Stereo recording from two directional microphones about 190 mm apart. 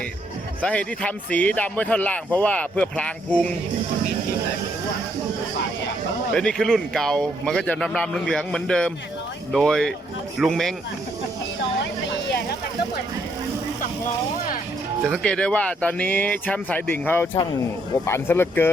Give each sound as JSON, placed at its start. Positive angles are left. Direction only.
{"t": 0.6, "sound": "speech", "side_deg": 5}
{"t": 6.3, "sound": "speech", "side_deg": 5}
{"t": 15.0, "sound": "speech", "side_deg": 5}